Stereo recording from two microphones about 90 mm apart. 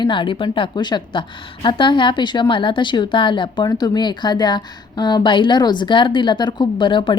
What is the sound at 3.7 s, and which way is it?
A woman's voice, 50° left (ahead or behind).